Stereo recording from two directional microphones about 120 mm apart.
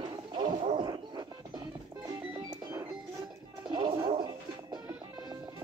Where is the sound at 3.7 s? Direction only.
35° right (ahead or behind).